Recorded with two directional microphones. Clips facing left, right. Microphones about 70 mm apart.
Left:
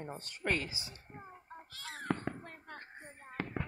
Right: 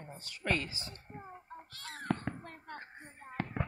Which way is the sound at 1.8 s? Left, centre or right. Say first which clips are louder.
Even; centre.